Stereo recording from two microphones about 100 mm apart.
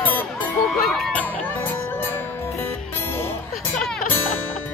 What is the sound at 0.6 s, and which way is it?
Crowd, centre (ahead or behind).